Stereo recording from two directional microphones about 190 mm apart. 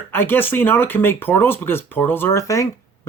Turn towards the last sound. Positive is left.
turn(degrees=15)  # may be behind; listen again after turning